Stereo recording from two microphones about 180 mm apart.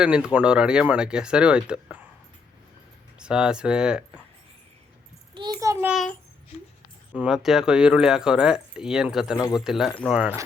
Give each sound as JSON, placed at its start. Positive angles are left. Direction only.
{"t": 0.0, "sound": "speech", "side_deg": -5}
{"t": 3.2, "sound": "speech", "side_deg": -5}
{"t": 5.3, "sound": "a child's voice", "side_deg": -25}
{"t": 5.9, "sound": "speech", "side_deg": 0}
{"t": 7.2, "sound": "speech", "side_deg": -5}